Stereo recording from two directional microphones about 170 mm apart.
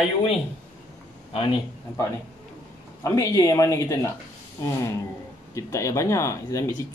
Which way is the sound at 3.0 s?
20° left (ahead or behind).